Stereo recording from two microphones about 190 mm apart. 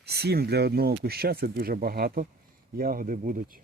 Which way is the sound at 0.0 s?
60° right (ahead or behind).